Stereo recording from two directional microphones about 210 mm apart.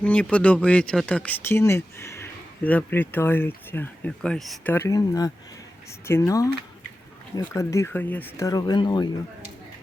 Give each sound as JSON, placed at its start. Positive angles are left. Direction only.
{"t": 0.0, "sound": "speech", "side_deg": 5}